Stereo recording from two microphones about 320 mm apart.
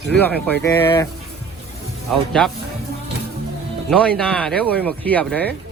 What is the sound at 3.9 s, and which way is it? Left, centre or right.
Speech, centre.